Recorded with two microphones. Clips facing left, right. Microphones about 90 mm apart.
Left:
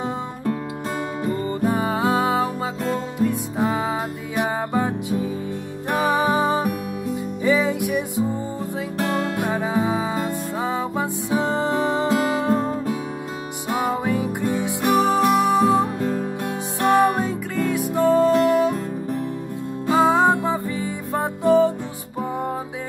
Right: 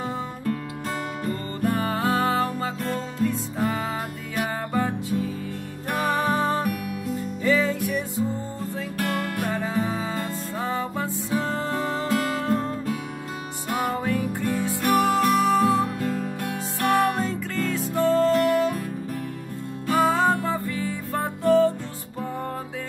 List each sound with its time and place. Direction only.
1.2 s music: 15° left (ahead or behind)
19.9 s music: 20° left (ahead or behind)